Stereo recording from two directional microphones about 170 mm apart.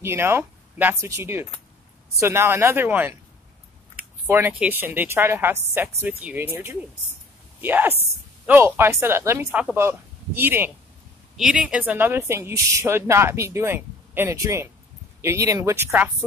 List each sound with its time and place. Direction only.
0.0 s speech: 15° right (ahead or behind)
4.3 s speech: 10° right (ahead or behind)